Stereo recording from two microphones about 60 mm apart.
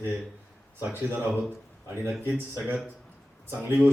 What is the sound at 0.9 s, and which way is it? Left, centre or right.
Speech, right.